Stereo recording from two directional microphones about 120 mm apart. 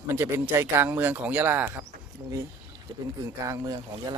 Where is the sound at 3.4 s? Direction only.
30° right (ahead or behind).